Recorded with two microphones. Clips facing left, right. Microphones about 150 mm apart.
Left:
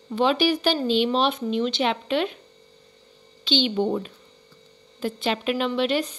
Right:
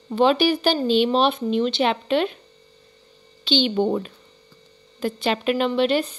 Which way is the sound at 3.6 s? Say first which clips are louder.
Right 2 dB; 50° right (ahead or behind).